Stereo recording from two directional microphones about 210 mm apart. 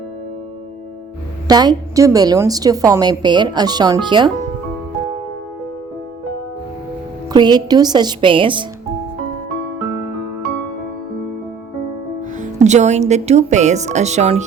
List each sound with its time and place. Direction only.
1.5 s a woman's voice: 20° right (ahead or behind)
7.3 s a woman's voice: 20° right (ahead or behind)
12.4 s speech: 35° right (ahead or behind)